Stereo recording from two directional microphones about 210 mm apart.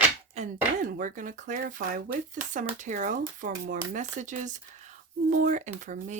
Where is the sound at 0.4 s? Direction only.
30° right (ahead or behind).